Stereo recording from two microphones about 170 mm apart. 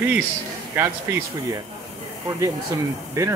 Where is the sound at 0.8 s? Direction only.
10° right (ahead or behind).